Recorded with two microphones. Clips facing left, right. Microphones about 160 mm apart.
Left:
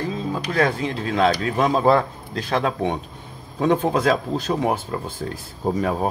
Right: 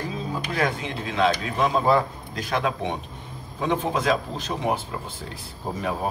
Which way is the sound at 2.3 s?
35° left (ahead or behind).